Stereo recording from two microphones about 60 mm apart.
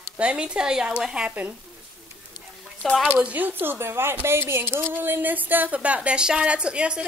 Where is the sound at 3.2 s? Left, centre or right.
Right.